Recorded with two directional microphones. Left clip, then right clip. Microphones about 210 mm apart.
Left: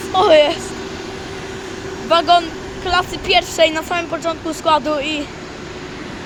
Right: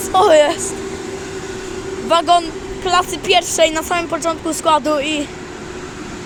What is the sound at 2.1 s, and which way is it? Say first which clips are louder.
A woman's voice: even; 25° right (ahead or behind).